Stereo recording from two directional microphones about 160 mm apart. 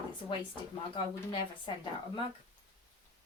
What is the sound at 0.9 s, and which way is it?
Speech, 35° left (ahead or behind).